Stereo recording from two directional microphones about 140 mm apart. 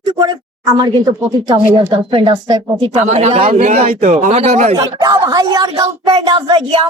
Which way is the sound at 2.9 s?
55° right (ahead or behind).